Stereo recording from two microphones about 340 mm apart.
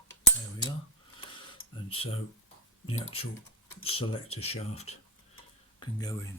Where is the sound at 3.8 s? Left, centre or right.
Centre.